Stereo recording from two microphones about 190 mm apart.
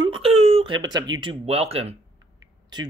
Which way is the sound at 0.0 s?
30° right (ahead or behind).